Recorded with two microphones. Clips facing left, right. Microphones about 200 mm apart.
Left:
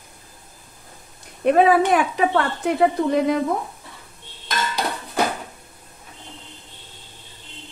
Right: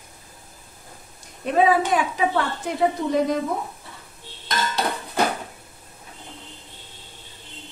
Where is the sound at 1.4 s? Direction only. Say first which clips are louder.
Left 4 dB; 65° left (ahead or behind).